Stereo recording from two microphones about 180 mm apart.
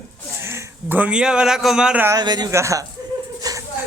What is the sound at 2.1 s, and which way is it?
Speech, 20° right (ahead or behind).